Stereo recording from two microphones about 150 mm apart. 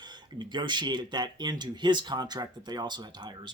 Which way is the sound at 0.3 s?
30° right (ahead or behind).